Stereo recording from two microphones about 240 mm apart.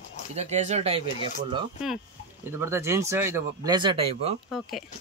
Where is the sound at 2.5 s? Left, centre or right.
Centre.